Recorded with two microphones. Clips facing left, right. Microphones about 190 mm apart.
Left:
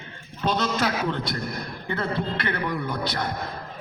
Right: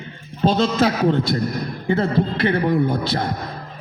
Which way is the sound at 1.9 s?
25° right (ahead or behind).